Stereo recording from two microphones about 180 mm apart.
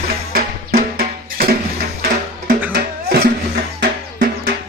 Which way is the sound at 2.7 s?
60° right (ahead or behind).